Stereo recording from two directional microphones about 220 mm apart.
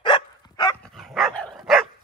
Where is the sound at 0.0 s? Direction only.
20° left (ahead or behind).